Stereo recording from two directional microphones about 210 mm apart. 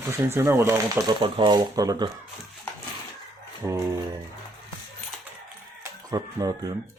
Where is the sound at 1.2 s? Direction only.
20° right (ahead or behind).